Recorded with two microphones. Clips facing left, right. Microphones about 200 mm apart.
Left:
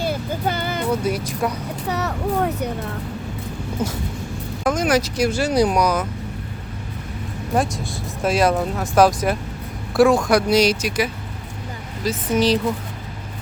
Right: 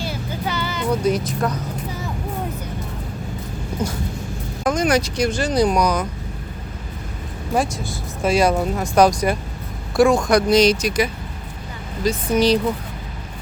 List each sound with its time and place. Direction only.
0.0 s music: 50° left (ahead or behind)
1.0 s speech: 10° left (ahead or behind)
1.9 s a sound: 75° left (ahead or behind)
3.8 s speech: 5° left (ahead or behind)
7.5 s speech: centre (ahead or behind)